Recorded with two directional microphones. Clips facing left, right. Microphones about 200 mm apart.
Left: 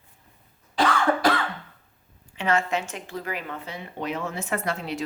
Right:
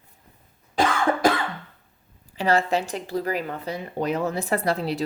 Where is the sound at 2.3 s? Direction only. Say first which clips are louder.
Right 3 dB; 35° right (ahead or behind).